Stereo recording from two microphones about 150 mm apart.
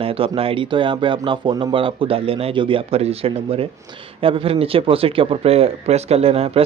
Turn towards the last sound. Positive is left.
turn(degrees=-40)  # may be behind; listen again after turning